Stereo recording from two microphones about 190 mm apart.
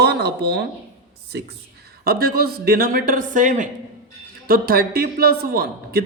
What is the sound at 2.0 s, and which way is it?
A woman's voice, 55° right (ahead or behind).